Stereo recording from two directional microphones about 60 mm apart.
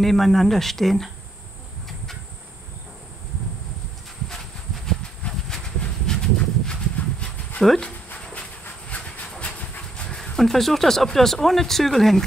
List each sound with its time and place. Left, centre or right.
0.0 s speech: centre
5.5 s a sound: centre
7.0 s dog: left
8.8 s train: centre
9.4 s speech: left; by 12.3 s centre